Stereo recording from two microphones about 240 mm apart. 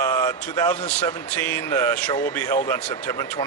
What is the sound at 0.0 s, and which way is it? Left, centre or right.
Speech, centre.